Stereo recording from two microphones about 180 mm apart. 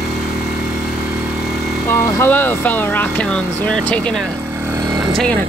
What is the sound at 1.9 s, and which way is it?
Speech, 10° left (ahead or behind).